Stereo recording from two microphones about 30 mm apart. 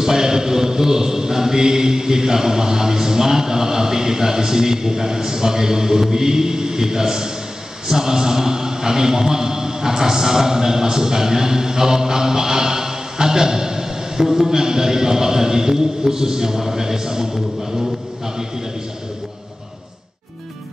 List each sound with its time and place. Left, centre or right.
0.0 s a man's voice: centre